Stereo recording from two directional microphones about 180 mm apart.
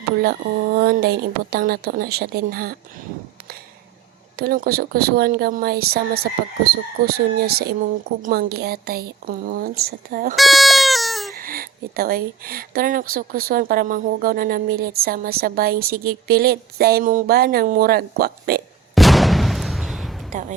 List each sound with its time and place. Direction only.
0.8 s speech: 60° right (ahead or behind)
4.4 s speech: 55° right (ahead or behind)
10.3 s a sound: centre (ahead or behind)
11.3 s speech: 55° right (ahead or behind)
18.9 s artillery fire: centre (ahead or behind)